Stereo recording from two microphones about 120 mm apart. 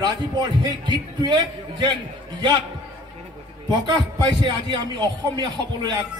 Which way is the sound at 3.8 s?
40° right (ahead or behind).